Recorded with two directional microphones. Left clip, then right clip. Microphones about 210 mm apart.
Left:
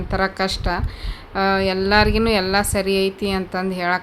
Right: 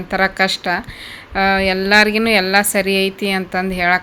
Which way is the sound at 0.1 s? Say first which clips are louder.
Right 6 dB; centre (ahead or behind).